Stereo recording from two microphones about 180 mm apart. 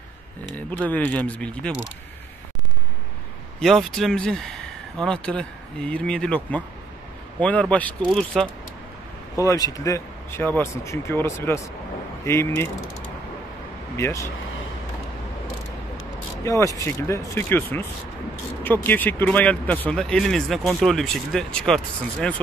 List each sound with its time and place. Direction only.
0.8 s speech: 10° left (ahead or behind)
3.5 s a man's voice: centre (ahead or behind)
9.4 s speech: 20° left (ahead or behind)
13.9 s speech: 15° left (ahead or behind)
16.4 s speech: 15° left (ahead or behind)